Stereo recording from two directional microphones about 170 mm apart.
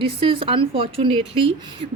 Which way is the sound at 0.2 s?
30° right (ahead or behind).